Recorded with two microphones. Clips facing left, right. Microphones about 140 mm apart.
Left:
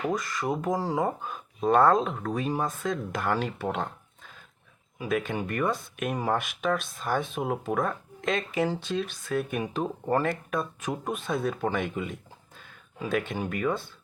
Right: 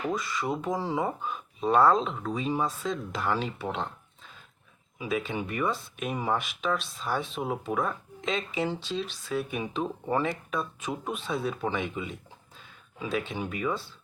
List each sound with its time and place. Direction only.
0.1 s speech: 50° left (ahead or behind)